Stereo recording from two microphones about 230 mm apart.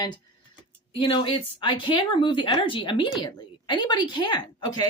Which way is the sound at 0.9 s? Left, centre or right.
Left.